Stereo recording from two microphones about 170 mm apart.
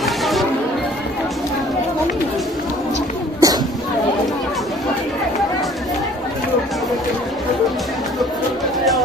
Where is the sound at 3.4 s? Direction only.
20° right (ahead or behind).